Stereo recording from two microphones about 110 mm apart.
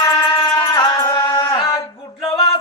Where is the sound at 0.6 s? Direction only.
40° left (ahead or behind).